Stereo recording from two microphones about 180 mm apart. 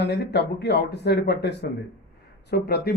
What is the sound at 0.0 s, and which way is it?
Speech, 65° left (ahead or behind).